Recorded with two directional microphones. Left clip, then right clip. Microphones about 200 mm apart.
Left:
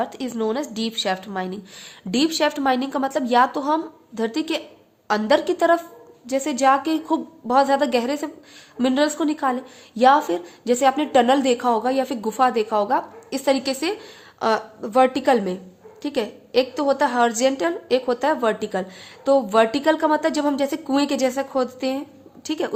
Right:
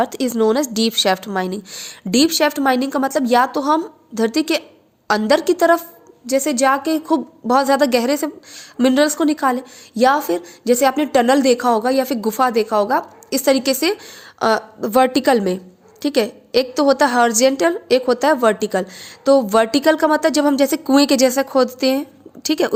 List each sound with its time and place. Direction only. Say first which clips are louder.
0.0 s a woman's voice: right 8 dB; 25° right (ahead or behind)